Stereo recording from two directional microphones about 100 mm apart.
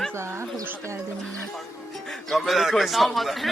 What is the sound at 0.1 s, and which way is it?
Speech, 25° right (ahead or behind).